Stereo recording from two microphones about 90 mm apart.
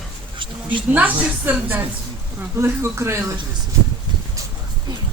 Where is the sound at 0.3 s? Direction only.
65° right (ahead or behind).